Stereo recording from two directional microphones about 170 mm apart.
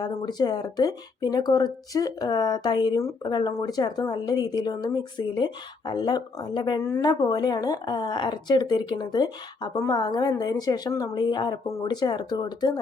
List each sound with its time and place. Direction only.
0.0 s speech: 25° left (ahead or behind)